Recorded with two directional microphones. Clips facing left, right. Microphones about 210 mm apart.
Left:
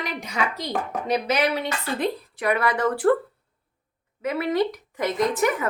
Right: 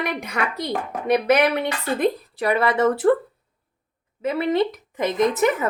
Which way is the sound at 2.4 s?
30° right (ahead or behind).